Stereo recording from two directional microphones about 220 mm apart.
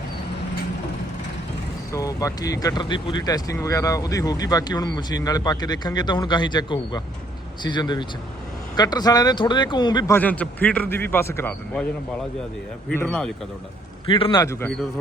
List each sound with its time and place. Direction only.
1.9 s speech: 15° left (ahead or behind)
10.2 s speech: 5° left (ahead or behind)
12.9 s speech: 5° left (ahead or behind)
14.1 s speech: 25° left (ahead or behind)
14.3 s speech: 10° left (ahead or behind)